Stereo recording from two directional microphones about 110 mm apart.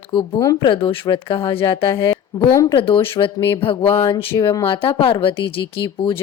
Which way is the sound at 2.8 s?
55° left (ahead or behind).